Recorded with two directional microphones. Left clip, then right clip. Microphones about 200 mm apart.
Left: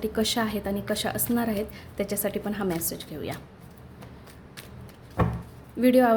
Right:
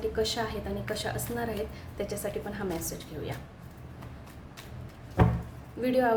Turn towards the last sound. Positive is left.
turn(degrees=50)  # may be behind; listen again after turning